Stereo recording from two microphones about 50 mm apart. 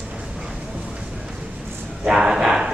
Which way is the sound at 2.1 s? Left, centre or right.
Centre.